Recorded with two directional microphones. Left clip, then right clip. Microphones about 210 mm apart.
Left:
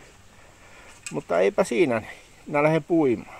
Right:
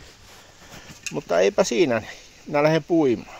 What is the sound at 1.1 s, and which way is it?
Speech, 5° right (ahead or behind).